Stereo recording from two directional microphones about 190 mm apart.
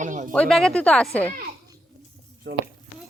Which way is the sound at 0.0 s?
40° right (ahead or behind).